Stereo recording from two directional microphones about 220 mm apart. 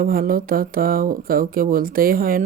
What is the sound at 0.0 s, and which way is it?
Speech, 40° right (ahead or behind).